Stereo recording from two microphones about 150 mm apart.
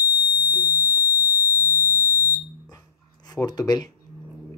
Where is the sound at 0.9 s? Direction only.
10° right (ahead or behind).